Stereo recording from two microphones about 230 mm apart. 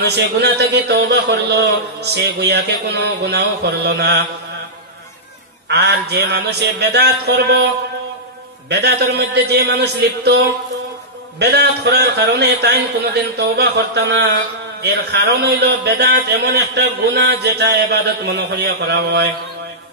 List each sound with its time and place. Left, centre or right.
0.0 s a man's voice: right
5.7 s a man's voice: right
8.6 s a man's voice: right